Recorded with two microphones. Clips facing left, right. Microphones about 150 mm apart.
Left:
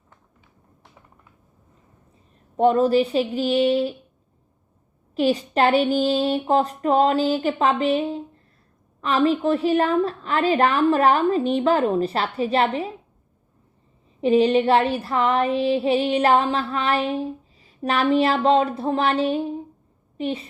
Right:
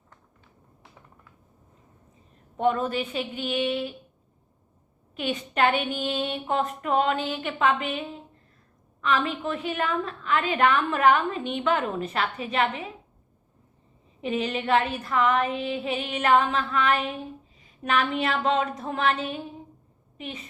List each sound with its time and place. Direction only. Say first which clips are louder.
2.6 s female singing: left 8 dB; 35° left (ahead or behind)
5.1 s female singing: left 8 dB; 35° left (ahead or behind)
14.2 s female singing: left 11 dB; 35° left (ahead or behind)